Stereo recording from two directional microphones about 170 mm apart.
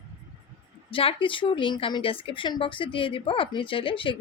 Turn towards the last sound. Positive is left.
turn(degrees=30)  # may be behind; listen again after turning